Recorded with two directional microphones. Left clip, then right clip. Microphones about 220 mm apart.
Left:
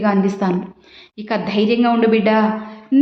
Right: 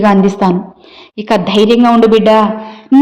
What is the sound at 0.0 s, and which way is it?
A woman's voice, 30° right (ahead or behind).